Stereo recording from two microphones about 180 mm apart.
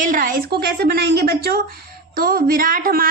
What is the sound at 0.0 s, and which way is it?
A woman's voice, 50° right (ahead or behind).